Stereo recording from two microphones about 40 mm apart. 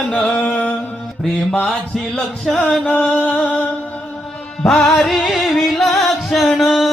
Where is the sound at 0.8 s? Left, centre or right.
Centre.